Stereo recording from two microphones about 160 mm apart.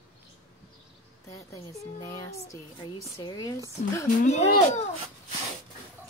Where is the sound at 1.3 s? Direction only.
20° left (ahead or behind).